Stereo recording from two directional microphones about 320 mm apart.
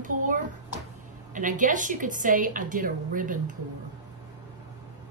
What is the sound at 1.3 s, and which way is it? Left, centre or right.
A woman's voice, right.